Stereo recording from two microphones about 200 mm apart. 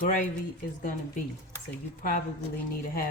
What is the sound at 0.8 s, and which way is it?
Speech, 40° left (ahead or behind).